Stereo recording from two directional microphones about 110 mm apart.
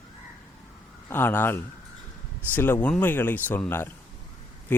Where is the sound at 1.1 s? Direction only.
20° left (ahead or behind).